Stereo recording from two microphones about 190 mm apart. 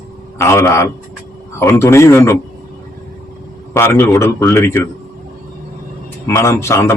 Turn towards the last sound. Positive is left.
turn(degrees=15)  # may be behind; listen again after turning